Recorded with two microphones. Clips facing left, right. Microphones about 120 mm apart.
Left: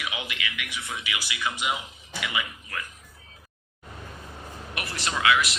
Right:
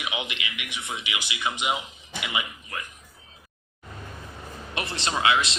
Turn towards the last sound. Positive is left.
turn(degrees=-25)  # may be behind; listen again after turning